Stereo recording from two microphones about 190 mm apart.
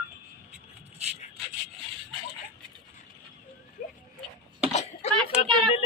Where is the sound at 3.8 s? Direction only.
45° left (ahead or behind).